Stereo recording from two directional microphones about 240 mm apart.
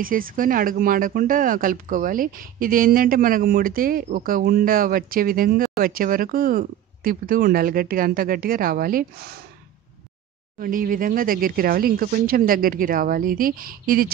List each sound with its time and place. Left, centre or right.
0.0 s speech: right
10.6 s speech: right